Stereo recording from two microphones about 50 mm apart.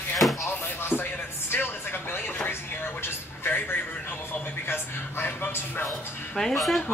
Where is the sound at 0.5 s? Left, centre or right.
Left.